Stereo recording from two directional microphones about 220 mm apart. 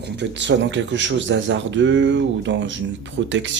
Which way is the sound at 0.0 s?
55° right (ahead or behind).